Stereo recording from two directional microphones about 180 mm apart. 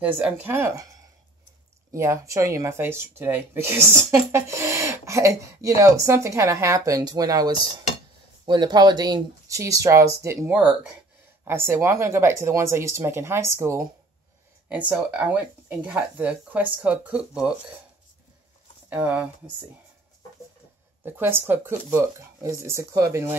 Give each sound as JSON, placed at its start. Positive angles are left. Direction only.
{"t": 0.0, "sound": "speech", "side_deg": -10}
{"t": 18.9, "sound": "speech", "side_deg": -10}
{"t": 21.0, "sound": "speech", "side_deg": -10}